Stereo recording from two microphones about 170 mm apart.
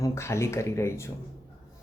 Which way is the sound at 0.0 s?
15° left (ahead or behind).